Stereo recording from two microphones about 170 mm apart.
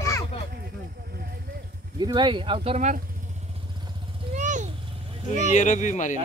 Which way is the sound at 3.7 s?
25° right (ahead or behind).